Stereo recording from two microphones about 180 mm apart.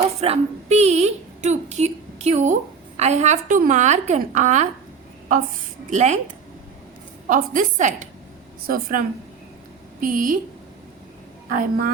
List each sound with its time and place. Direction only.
0.2 s a sound: 35° right (ahead or behind)
3.0 s a woman's voice: 40° right (ahead or behind)
5.9 s a woman's voice: 40° right (ahead or behind)
7.3 s a woman's voice: 45° right (ahead or behind)
11.4 s a woman's voice: 50° right (ahead or behind)